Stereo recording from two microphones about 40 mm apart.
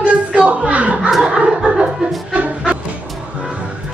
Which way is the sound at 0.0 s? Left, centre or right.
Right.